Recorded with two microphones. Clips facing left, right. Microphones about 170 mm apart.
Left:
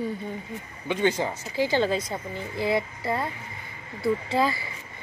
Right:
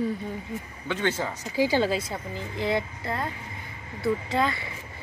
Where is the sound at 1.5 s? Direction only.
10° right (ahead or behind).